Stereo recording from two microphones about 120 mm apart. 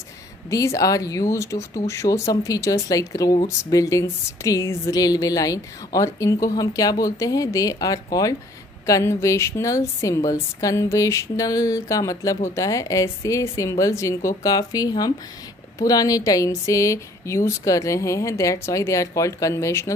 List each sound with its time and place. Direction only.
0.5 s speech: 30° left (ahead or behind)